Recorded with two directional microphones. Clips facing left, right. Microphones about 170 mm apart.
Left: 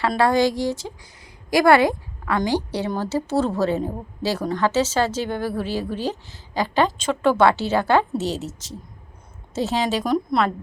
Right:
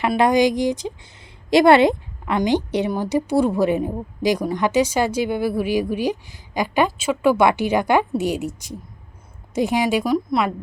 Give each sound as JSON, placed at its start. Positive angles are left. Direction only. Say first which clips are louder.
{"t": 0.2, "sound": "a woman's voice", "louder": "right 2 dB", "side_deg": -15}